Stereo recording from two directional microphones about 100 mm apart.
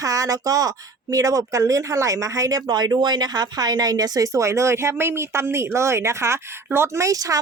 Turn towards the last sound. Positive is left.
turn(degrees=-35)  # may be behind; listen again after turning